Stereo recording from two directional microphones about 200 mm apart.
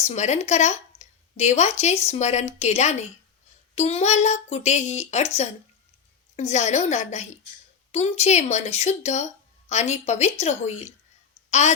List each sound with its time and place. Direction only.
0.0 s a woman's voice: 35° left (ahead or behind)